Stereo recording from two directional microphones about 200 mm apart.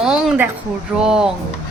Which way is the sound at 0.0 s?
5° right (ahead or behind).